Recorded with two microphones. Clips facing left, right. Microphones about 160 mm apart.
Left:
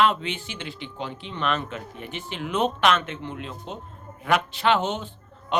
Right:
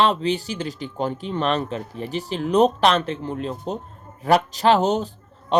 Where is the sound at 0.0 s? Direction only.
35° right (ahead or behind).